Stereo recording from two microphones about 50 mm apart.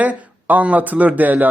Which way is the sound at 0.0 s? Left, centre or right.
Right.